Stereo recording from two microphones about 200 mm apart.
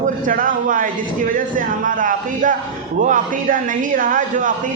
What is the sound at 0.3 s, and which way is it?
A man's voice, 45° right (ahead or behind).